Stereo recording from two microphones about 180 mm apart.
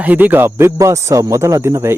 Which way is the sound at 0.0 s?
10° right (ahead or behind).